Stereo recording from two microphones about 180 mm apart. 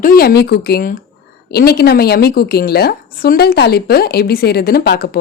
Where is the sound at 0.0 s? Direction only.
55° left (ahead or behind).